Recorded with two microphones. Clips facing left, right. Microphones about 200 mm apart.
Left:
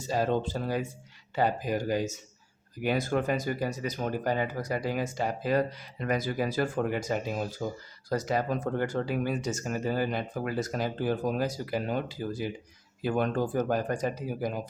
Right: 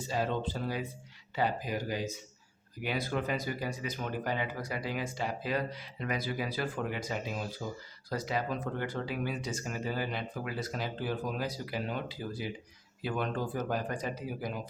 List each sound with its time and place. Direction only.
0.0 s speech: 45° left (ahead or behind)